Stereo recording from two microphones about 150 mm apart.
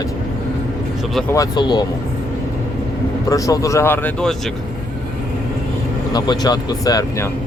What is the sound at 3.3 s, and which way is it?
Speech, 20° left (ahead or behind).